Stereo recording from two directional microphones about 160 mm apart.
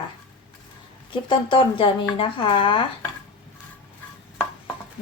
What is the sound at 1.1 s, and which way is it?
Speech, 30° left (ahead or behind).